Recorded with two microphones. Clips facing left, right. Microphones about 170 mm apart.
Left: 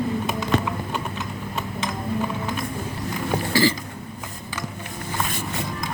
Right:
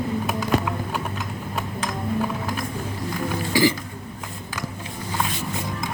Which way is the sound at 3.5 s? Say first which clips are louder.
Right 1 dB; 15° right (ahead or behind).